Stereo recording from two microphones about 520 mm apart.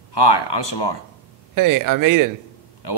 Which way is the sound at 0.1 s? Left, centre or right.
Left.